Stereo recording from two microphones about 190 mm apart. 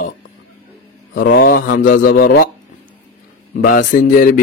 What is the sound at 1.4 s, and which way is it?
Mantra, 50° left (ahead or behind).